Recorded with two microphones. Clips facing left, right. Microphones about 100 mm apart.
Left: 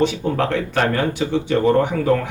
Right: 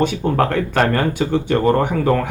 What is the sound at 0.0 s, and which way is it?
Speech, 50° right (ahead or behind).